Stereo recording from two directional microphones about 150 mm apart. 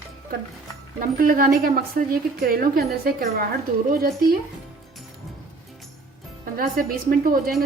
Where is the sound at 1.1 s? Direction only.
70° right (ahead or behind).